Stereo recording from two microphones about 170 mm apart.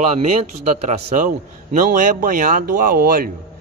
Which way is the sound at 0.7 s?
40° right (ahead or behind).